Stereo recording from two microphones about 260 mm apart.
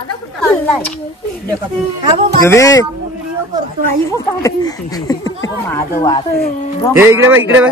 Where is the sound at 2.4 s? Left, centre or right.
Centre.